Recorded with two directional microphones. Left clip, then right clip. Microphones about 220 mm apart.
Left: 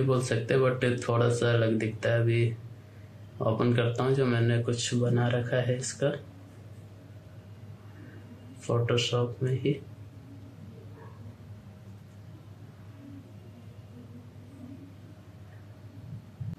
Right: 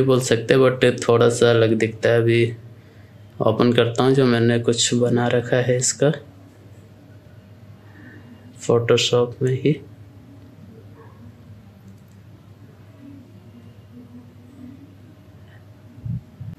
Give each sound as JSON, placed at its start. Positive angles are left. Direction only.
{"t": 0.1, "sound": "speech", "side_deg": -45}
{"t": 8.5, "sound": "speech", "side_deg": -40}